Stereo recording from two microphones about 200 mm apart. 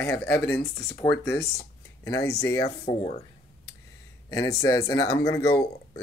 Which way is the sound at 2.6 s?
30° left (ahead or behind).